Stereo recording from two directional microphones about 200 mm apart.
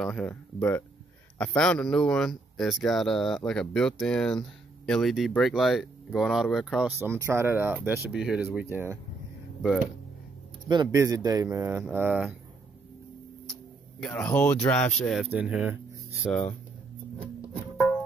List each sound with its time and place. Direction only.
0.0 s speech: 5° left (ahead or behind)
7.0 s speech: 10° right (ahead or behind)
10.7 s speech: 20° right (ahead or behind)
13.5 s a sound: 5° left (ahead or behind)
15.0 s speech: centre (ahead or behind)